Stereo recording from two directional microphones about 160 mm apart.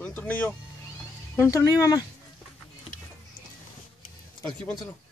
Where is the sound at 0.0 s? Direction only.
10° left (ahead or behind).